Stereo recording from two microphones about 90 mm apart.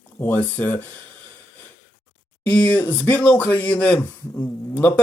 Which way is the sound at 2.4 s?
20° left (ahead or behind).